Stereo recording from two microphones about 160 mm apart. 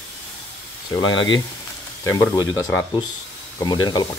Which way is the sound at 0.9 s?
30° left (ahead or behind).